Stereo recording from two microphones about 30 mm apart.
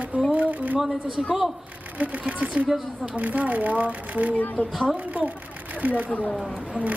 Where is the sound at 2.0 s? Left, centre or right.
Right.